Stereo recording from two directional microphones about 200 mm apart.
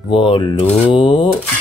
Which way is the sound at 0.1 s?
25° left (ahead or behind).